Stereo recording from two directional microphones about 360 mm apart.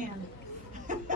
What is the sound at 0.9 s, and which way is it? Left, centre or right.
Music, right.